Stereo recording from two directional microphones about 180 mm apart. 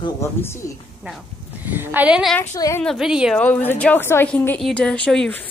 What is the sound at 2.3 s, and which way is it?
Speech, 15° left (ahead or behind).